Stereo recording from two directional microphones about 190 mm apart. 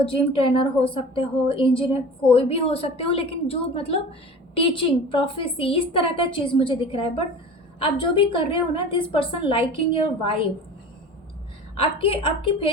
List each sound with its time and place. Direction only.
0.1 s a woman's voice: 30° left (ahead or behind)
11.8 s a woman's voice: 30° left (ahead or behind)